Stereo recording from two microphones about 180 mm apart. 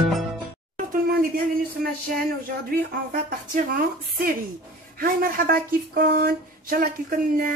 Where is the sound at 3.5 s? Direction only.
50° right (ahead or behind).